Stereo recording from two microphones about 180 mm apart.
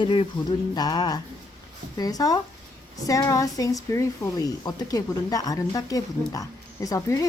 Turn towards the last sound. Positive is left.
turn(degrees=15)  # may be behind; listen again after turning